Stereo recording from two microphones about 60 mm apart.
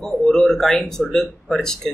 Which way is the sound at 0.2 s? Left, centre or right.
Centre.